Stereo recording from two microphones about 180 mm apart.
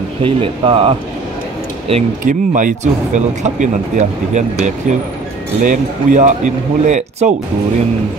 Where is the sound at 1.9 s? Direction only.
40° right (ahead or behind).